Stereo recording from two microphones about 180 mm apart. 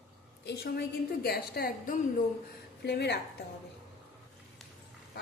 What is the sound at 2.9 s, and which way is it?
Speech, 70° left (ahead or behind).